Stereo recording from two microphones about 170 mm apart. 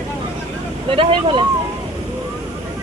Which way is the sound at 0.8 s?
30° right (ahead or behind).